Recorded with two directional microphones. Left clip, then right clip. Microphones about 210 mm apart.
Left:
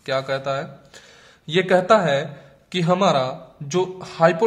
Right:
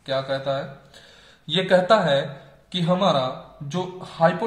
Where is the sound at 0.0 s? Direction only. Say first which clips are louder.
Left 2 dB; 45° left (ahead or behind).